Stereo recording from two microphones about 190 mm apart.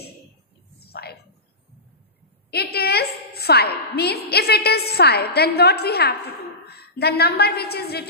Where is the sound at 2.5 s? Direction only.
55° left (ahead or behind).